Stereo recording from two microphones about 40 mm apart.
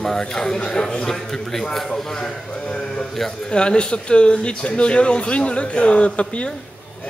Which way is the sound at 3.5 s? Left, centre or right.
Left.